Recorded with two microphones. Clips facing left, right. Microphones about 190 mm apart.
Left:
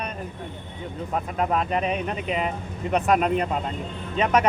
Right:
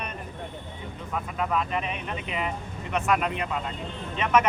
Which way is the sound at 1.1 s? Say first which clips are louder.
Left 3 dB; 40° left (ahead or behind).